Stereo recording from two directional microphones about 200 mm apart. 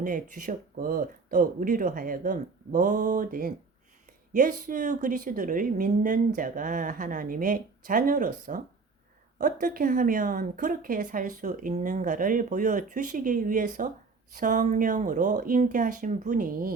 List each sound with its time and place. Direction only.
0.0 s a woman's voice: 40° right (ahead or behind)